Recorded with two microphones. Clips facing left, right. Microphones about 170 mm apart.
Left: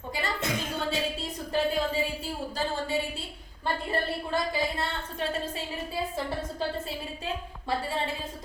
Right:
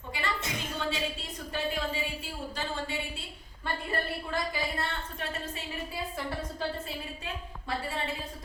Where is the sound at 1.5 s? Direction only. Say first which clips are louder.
Left 6 dB; 35° left (ahead or behind).